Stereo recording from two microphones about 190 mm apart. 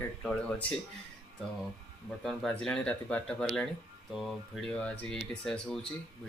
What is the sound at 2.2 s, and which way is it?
Speech, 5° left (ahead or behind).